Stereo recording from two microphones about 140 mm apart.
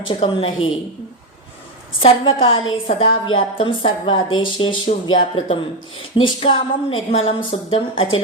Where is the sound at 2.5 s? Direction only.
40° left (ahead or behind).